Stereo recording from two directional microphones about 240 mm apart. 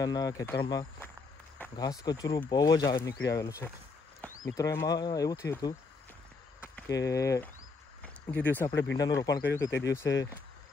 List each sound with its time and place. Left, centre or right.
0.0 s speech: centre
8.0 s a sound: centre
8.9 s speech: centre